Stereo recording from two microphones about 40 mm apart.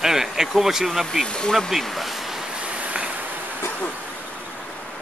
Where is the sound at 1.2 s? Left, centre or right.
Left.